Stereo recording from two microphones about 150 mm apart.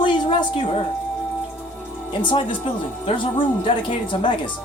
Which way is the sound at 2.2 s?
30° left (ahead or behind).